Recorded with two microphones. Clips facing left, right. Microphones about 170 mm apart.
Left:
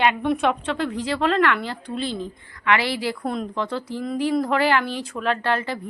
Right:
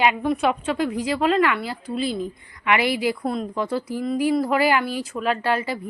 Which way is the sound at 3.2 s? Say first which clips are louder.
Right 1 dB; centre (ahead or behind).